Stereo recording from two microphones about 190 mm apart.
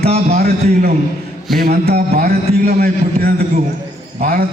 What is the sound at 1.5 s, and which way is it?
A man's voice, 55° right (ahead or behind).